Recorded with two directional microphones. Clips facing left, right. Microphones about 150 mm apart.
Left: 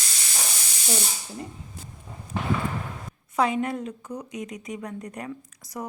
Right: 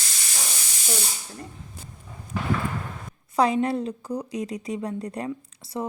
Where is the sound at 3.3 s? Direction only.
35° right (ahead or behind).